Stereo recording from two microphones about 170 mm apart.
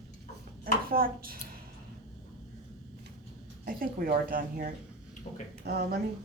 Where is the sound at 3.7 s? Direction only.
60° right (ahead or behind).